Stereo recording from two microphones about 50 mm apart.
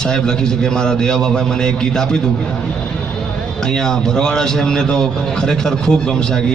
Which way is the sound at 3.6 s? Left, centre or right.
Centre.